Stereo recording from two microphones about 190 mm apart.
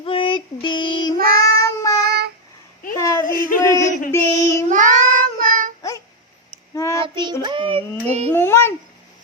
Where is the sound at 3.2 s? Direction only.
45° left (ahead or behind).